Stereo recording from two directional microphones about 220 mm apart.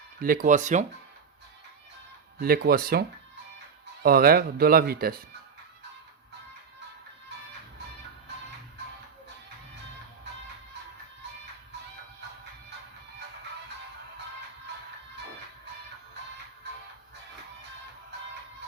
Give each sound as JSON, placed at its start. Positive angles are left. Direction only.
{"t": 0.2, "sound": "speech", "side_deg": -40}
{"t": 2.4, "sound": "speech", "side_deg": -45}